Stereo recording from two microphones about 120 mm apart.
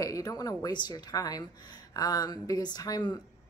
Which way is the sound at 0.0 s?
30° left (ahead or behind).